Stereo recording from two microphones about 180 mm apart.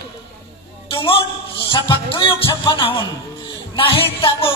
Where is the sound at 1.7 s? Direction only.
30° left (ahead or behind).